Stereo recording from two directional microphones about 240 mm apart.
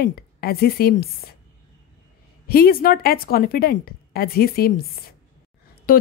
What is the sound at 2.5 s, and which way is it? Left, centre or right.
A woman's voice, left.